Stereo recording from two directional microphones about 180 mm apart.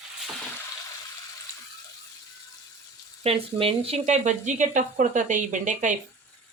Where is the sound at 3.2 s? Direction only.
30° right (ahead or behind).